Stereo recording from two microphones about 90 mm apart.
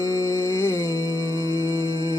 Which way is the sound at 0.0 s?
40° left (ahead or behind).